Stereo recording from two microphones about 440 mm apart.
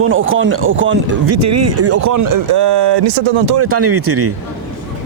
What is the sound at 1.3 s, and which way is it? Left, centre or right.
Speech, right.